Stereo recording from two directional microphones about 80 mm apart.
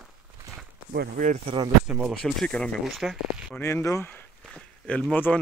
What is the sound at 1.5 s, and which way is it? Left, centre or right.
Speech, right.